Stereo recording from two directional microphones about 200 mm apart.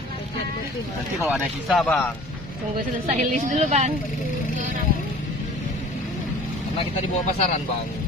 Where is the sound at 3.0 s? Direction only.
40° right (ahead or behind).